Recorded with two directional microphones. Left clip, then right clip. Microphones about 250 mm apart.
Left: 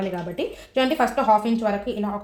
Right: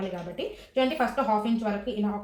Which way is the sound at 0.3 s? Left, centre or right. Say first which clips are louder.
Left 3 dB; left.